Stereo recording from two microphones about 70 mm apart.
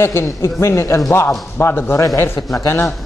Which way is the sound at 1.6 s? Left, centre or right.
Left.